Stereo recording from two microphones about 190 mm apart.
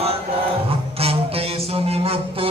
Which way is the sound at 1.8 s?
30° right (ahead or behind).